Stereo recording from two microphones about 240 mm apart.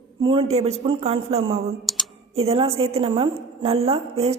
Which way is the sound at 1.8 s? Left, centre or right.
Centre.